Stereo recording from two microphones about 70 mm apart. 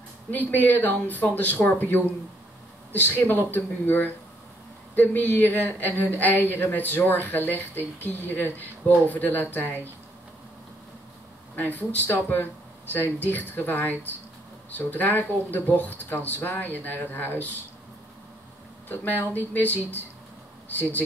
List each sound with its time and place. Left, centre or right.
0.3 s a woman's voice: left
11.5 s a woman's voice: left
19.1 s a woman's voice: left